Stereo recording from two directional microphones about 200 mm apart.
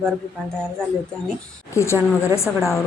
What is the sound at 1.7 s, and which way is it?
Speech, 15° left (ahead or behind).